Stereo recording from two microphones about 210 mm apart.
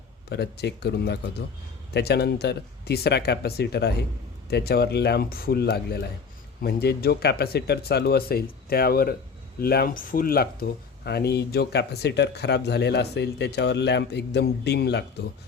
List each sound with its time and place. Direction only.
0.3 s speech: 50° left (ahead or behind)